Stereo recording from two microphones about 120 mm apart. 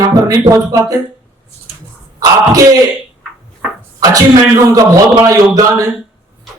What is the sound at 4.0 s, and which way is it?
A man's voice, 30° right (ahead or behind).